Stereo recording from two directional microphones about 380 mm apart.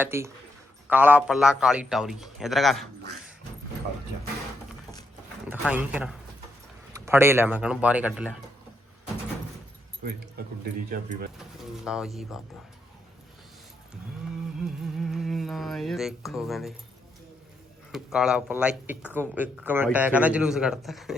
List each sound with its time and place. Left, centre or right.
0.0 s speech: centre
5.5 s speech: centre
10.9 s speech: right
11.3 s speech: centre
14.6 s music: centre
17.9 s speech: centre